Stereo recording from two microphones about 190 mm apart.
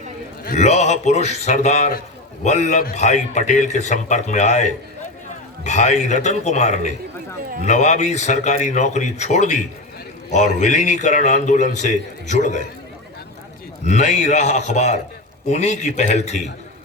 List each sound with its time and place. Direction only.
0.4 s a man's voice: 35° left (ahead or behind)
13.8 s a man's voice: 40° left (ahead or behind)